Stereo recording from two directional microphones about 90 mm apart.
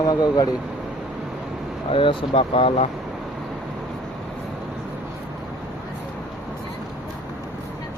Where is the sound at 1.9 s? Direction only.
80° left.